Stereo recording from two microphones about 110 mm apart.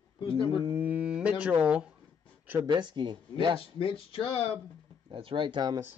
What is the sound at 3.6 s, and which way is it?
Speech, 55° left (ahead or behind).